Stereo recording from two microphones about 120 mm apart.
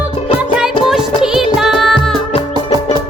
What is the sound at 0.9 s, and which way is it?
Music, 5° right (ahead or behind).